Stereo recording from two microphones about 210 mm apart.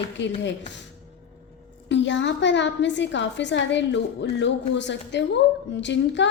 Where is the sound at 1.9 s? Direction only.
60° left (ahead or behind).